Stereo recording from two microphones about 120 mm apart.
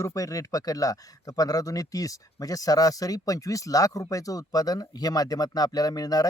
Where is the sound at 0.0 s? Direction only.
30° left (ahead or behind).